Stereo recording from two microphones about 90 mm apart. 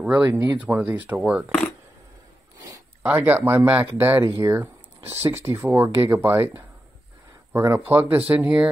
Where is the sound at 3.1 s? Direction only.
20° right (ahead or behind).